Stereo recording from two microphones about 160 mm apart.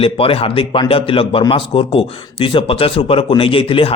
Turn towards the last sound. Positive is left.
turn(degrees=35)  # may be behind; listen again after turning